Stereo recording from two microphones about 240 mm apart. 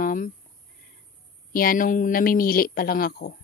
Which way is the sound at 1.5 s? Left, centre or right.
Left.